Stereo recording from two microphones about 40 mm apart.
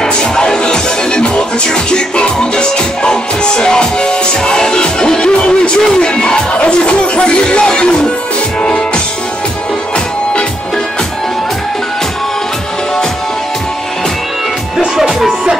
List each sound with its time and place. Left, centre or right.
0.0 s music: centre
15.0 s music: centre